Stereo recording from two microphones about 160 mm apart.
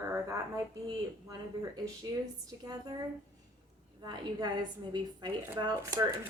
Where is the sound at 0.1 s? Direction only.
20° right (ahead or behind).